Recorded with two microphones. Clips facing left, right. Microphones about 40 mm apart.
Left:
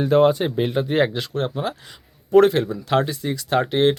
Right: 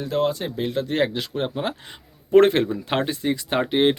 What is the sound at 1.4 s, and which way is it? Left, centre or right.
Speech, centre.